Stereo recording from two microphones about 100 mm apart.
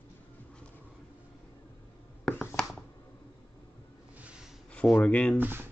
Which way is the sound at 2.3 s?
20° left (ahead or behind).